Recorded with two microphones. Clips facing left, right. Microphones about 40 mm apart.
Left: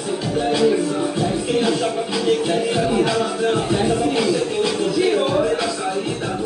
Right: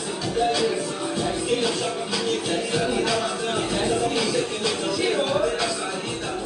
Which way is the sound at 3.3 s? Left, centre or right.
Centre.